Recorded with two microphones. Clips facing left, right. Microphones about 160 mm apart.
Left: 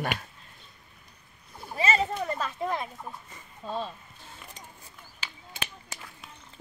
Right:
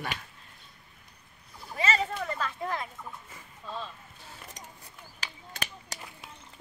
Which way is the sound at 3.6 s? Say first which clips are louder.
Left 5 dB; 40° left (ahead or behind).